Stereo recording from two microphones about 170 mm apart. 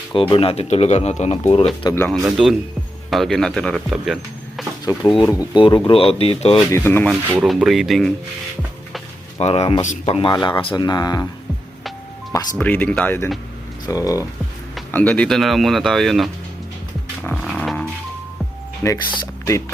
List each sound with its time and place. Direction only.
0.1 s speech: 30° left (ahead or behind)
1.9 s speech: 10° left (ahead or behind)
2.2 s speech: centre (ahead or behind)
4.9 s speech: 20° left (ahead or behind); by 6.6 s 35° left (ahead or behind)
6.7 s speech: 15° left (ahead or behind)
7.4 s speech: centre (ahead or behind)
9.4 s speech: 35° left (ahead or behind)
9.8 s speech: 45° left (ahead or behind)
10.2 s speech: 25° left (ahead or behind)
12.3 s speech: 15° left (ahead or behind)
14.9 s speech: 5° left (ahead or behind)
17.3 s music: centre (ahead or behind)
19.1 s speech: 20° left (ahead or behind)